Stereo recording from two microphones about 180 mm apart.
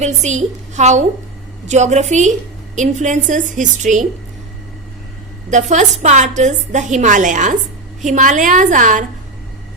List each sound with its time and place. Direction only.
0.0 s a woman's voice: 40° right (ahead or behind)
5.5 s a woman's voice: 40° right (ahead or behind)